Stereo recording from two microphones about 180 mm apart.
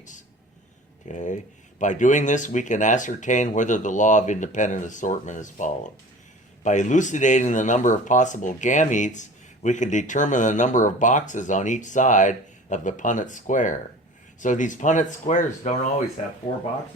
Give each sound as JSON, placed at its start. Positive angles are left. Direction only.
{"t": 1.0, "sound": "speech", "side_deg": 45}